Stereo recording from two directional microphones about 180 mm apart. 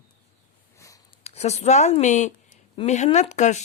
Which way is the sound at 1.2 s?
40° left (ahead or behind).